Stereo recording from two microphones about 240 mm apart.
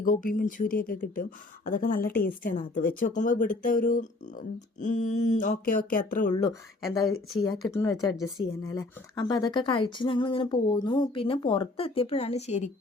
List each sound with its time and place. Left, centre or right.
0.0 s speech: left
7.3 s speech: centre